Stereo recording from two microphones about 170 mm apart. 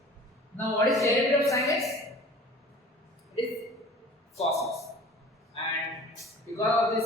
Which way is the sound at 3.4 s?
30° left (ahead or behind).